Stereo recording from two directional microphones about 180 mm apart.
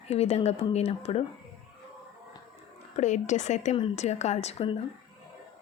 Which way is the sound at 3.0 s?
40° left (ahead or behind).